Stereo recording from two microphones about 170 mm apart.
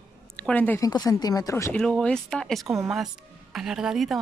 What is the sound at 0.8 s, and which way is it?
Speech, 20° left (ahead or behind).